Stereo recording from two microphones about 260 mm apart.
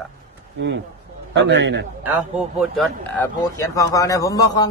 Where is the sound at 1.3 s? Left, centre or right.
Right.